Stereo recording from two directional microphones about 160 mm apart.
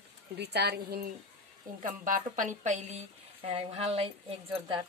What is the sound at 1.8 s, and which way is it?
A woman's voice, 55° right (ahead or behind).